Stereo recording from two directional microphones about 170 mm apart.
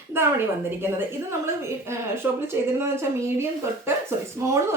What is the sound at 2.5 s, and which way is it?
Speech, 15° right (ahead or behind).